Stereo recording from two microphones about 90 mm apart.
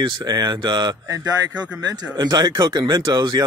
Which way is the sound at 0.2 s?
50° right (ahead or behind).